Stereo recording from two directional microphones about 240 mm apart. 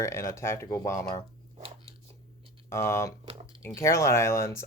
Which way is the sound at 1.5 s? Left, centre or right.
Right.